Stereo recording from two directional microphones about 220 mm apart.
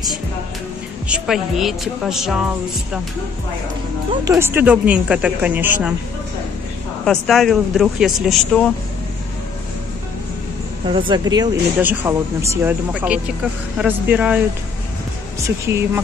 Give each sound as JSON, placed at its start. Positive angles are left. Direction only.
{"t": 1.0, "sound": "a woman's voice", "side_deg": -5}
{"t": 4.1, "sound": "speech", "side_deg": -15}
{"t": 7.1, "sound": "a woman's voice", "side_deg": 0}
{"t": 10.9, "sound": "speech", "side_deg": -20}
{"t": 15.4, "sound": "speech", "side_deg": -10}